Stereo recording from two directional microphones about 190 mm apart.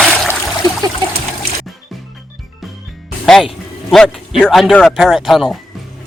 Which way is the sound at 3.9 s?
Centre (ahead or behind).